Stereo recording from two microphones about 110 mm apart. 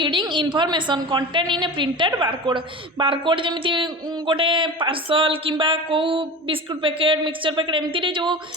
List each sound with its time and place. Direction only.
0.0 s speech: 45° right (ahead or behind)